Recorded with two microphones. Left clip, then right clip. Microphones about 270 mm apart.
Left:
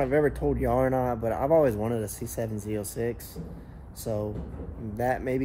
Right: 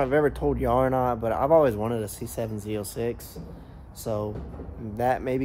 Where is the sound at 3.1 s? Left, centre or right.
Centre.